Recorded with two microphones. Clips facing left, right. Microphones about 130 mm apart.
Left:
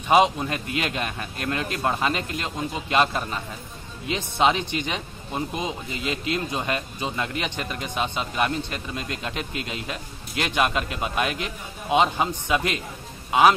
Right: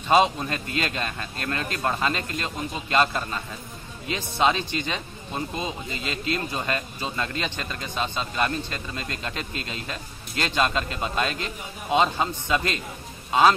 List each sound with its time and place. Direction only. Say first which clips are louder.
0.1 s speech: left 1 dB; 15° left (ahead or behind)